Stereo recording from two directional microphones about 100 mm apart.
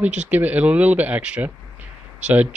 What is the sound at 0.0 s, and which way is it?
Speech, 15° right (ahead or behind).